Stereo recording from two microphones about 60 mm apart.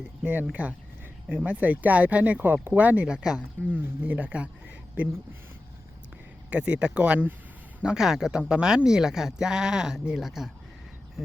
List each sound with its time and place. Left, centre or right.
0.6 s speech: right
3.1 s speech: centre
6.5 s speech: right
7.8 s speech: centre